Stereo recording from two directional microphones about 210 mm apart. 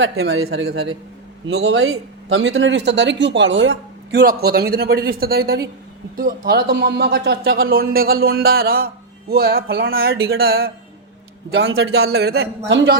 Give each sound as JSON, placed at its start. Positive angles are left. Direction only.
{"t": 0.0, "sound": "speech", "side_deg": -65}
{"t": 0.5, "sound": "speech", "side_deg": -50}
{"t": 1.5, "sound": "speech", "side_deg": -70}
{"t": 11.5, "sound": "speech", "side_deg": -70}
{"t": 11.9, "sound": "speech", "side_deg": -50}